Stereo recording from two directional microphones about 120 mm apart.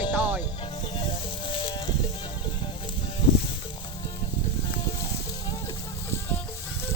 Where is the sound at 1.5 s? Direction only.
50° left (ahead or behind).